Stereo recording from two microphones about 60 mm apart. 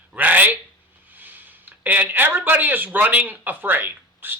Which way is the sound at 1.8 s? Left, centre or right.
Right.